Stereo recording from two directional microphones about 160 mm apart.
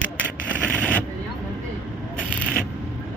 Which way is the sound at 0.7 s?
10° left (ahead or behind).